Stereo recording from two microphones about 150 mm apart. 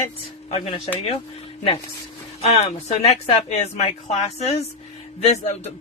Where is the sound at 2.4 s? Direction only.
45° left (ahead or behind).